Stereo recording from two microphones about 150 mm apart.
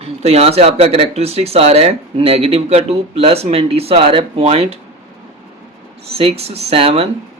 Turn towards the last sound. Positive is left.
turn(degrees=-40)  # may be behind; listen again after turning